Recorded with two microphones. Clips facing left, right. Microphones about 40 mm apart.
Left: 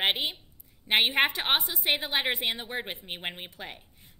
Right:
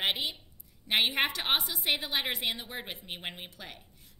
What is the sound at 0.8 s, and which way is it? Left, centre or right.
A woman's voice, left.